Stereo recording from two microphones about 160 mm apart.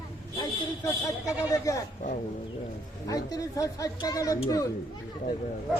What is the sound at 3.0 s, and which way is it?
Speech, 20° left (ahead or behind).